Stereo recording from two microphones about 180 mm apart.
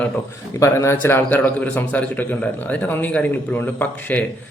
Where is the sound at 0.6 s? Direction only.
15° left (ahead or behind).